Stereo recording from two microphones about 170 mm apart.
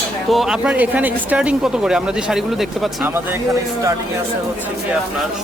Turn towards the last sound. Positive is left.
turn(degrees=-20)  # may be behind; listen again after turning